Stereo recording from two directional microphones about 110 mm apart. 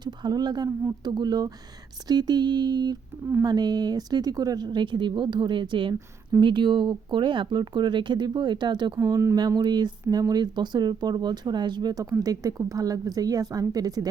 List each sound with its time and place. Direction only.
0.0 s speech: 40° right (ahead or behind)
9.0 s speech: 25° right (ahead or behind)